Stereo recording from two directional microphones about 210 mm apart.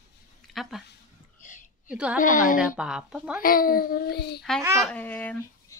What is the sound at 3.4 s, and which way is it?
A child's voice, 45° left (ahead or behind).